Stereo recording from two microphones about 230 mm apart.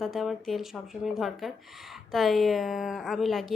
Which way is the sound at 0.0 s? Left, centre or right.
Centre.